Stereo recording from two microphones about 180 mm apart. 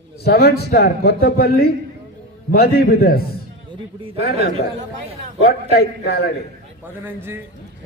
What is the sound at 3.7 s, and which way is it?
Speech, 30° right (ahead or behind).